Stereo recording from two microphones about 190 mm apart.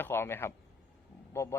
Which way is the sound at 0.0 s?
10° left (ahead or behind).